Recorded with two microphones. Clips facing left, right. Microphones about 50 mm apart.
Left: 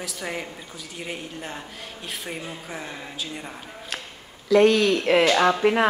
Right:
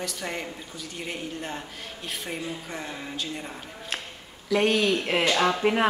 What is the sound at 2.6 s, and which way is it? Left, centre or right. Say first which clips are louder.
Speech: even; centre.